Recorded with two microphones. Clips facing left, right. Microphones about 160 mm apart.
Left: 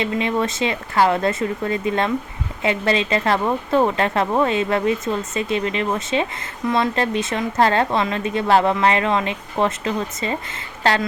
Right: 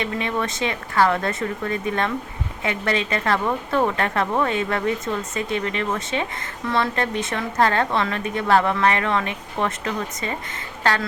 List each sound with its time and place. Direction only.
0.0 s speech: 20° left (ahead or behind)